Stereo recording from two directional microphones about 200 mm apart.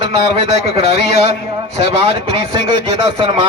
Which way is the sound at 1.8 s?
30° right (ahead or behind).